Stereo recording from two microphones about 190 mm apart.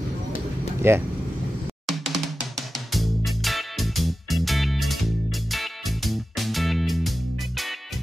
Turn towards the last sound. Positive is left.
turn(degrees=0)  # may be behind; listen again after turning